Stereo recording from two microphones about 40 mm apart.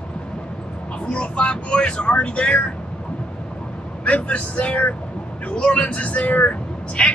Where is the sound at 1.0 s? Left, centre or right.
Left.